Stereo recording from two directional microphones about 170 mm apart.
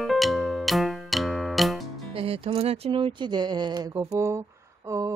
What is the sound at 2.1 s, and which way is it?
Speech, 35° right (ahead or behind).